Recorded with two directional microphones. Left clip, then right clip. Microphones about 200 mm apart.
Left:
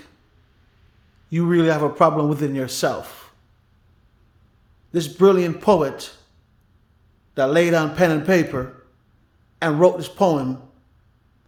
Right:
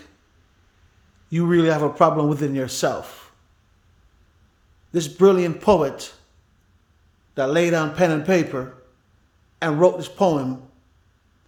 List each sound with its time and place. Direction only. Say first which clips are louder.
1.3 s a man's voice: even; 5° right (ahead or behind)
4.9 s a man's voice: even; centre (ahead or behind)
7.3 s a man's voice: left 2 dB; 5° left (ahead or behind)